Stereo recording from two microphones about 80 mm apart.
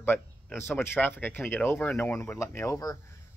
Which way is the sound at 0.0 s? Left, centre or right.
Left.